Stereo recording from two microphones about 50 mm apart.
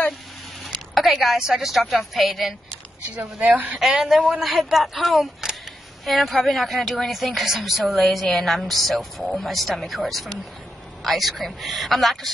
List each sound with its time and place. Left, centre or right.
0.9 s a woman's voice: centre
3.2 s speech: right
3.8 s a woman's voice: centre